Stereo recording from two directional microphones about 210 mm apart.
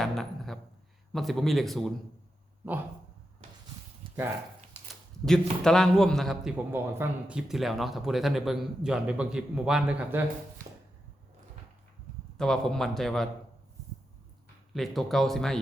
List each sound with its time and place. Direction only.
0.0 s dog: centre (ahead or behind)
1.1 s a man's voice: centre (ahead or behind)
5.2 s a man's voice: centre (ahead or behind)
12.4 s a man's voice: centre (ahead or behind)
14.7 s a man's voice: centre (ahead or behind)